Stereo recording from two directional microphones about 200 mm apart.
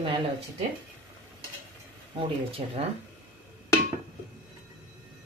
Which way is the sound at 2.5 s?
30° right (ahead or behind).